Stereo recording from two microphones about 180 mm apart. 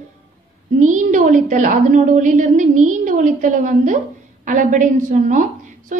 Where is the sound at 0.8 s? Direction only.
45° right (ahead or behind).